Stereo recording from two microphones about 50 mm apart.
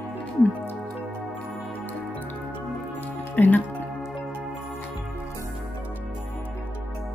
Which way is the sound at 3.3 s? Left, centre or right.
Left.